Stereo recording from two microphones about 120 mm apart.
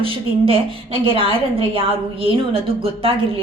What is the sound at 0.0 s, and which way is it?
A woman's voice, 50° right (ahead or behind).